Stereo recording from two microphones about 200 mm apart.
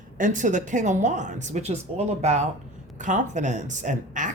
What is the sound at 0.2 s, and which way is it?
Speech, 40° right (ahead or behind).